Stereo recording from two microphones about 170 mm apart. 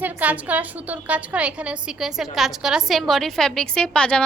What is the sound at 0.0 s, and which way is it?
A woman's voice, 10° right (ahead or behind).